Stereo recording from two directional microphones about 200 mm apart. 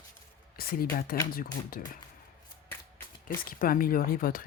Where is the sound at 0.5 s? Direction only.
45° left (ahead or behind).